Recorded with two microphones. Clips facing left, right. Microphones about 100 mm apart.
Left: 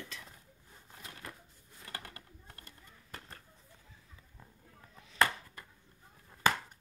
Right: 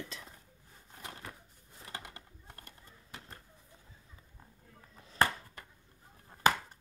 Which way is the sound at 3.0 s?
10° right (ahead or behind).